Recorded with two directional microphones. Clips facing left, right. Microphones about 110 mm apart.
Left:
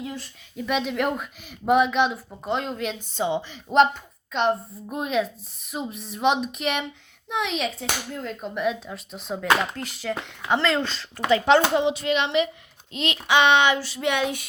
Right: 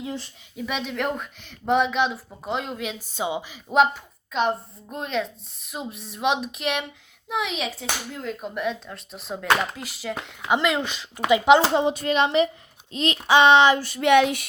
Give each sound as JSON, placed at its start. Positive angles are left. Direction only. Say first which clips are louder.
{"t": 0.5, "sound": "speech", "louder": "left 4 dB", "side_deg": 0}
{"t": 10.5, "sound": "speech", "louder": "even", "side_deg": -15}
{"t": 11.6, "sound": "speech", "louder": "right 1 dB", "side_deg": -30}
{"t": 11.9, "sound": "a sound", "louder": "right 2 dB", "side_deg": -40}
{"t": 13.7, "sound": "child singing", "louder": "right 7 dB", "side_deg": -50}